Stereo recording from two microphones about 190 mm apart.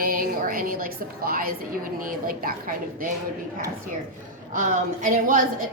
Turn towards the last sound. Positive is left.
turn(degrees=-45)  # may be behind; listen again after turning